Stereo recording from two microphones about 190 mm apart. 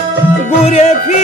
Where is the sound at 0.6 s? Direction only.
35° left (ahead or behind).